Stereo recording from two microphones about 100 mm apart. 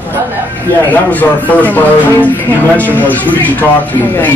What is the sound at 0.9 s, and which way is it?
Speech, 15° left (ahead or behind).